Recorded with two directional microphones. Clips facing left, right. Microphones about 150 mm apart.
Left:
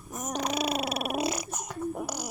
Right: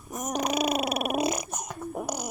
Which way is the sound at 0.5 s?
50° right (ahead or behind).